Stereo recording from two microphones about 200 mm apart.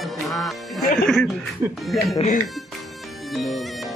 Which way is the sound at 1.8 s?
Centre (ahead or behind).